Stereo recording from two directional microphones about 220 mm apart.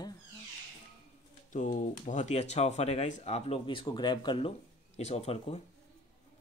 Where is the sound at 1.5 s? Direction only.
35° left (ahead or behind).